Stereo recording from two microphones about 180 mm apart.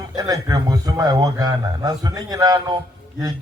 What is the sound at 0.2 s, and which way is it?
A man's voice, 20° right (ahead or behind).